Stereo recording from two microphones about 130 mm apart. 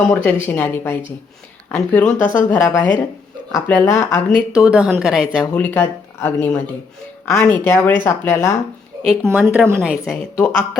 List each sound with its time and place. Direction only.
0.1 s speech: 10° left (ahead or behind)
4.5 s a woman's voice: 10° right (ahead or behind)
5.5 s speech: 15° left (ahead or behind)
9.3 s a woman's voice: 10° right (ahead or behind)
9.8 s speech: 5° right (ahead or behind)
10.2 s speech: 10° left (ahead or behind)